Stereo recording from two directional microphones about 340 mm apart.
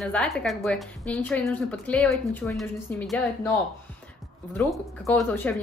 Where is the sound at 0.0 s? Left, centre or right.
Centre.